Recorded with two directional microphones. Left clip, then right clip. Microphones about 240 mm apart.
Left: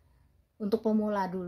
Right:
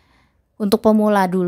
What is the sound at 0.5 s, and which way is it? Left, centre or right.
Speech, right.